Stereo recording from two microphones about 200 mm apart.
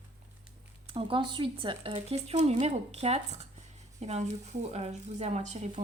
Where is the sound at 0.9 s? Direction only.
25° right (ahead or behind).